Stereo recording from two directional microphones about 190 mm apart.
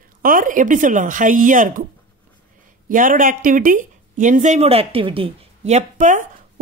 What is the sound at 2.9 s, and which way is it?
Speech, 45° right (ahead or behind).